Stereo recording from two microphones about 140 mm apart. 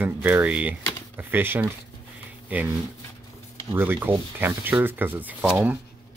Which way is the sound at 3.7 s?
15° right (ahead or behind).